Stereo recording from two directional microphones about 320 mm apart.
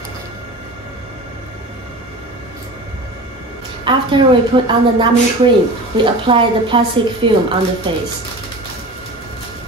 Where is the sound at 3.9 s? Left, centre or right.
Centre.